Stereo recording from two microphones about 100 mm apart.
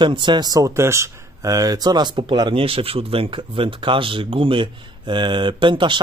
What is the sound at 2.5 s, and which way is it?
Speech, 70° right (ahead or behind).